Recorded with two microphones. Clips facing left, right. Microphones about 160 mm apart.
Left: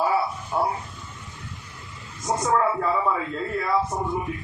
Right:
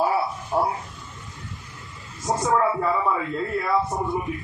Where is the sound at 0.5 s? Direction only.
35° right (ahead or behind).